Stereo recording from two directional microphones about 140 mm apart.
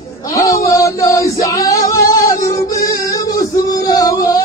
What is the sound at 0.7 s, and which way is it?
Male singing, 25° left (ahead or behind).